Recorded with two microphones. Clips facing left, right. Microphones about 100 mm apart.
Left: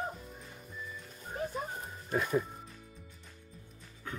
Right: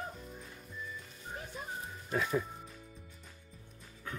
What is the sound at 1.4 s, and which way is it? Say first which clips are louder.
Music: left 11 dB; 40° left (ahead or behind).